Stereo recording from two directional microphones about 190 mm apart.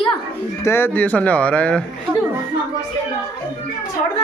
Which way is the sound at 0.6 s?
15° left (ahead or behind).